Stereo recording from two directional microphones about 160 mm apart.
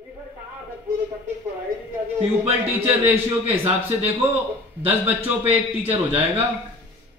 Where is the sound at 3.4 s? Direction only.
40° right (ahead or behind).